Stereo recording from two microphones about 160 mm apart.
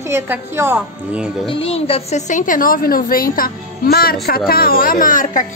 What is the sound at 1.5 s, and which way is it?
A woman's voice, 35° left (ahead or behind).